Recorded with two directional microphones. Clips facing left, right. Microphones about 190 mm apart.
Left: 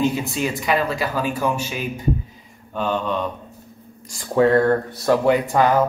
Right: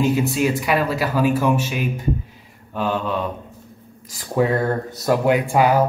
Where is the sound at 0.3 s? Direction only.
5° right (ahead or behind).